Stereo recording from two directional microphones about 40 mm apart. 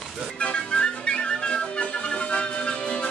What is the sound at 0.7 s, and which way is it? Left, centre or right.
Music, left.